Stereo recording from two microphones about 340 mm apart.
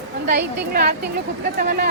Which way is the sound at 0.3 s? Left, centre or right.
Right.